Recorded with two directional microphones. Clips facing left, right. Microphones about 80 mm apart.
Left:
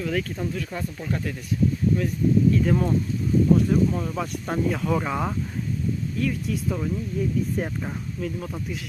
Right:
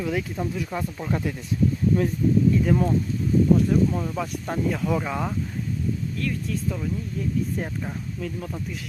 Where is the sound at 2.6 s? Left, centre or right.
Centre.